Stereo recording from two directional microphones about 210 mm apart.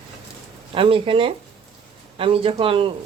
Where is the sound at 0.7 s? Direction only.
25° right (ahead or behind).